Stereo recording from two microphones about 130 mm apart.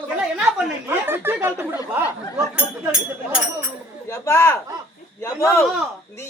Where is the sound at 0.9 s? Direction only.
15° right (ahead or behind).